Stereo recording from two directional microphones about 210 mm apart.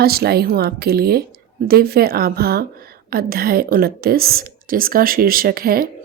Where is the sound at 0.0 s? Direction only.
50° right (ahead or behind).